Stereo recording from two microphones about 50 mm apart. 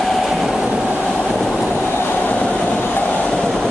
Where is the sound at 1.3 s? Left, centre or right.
Centre.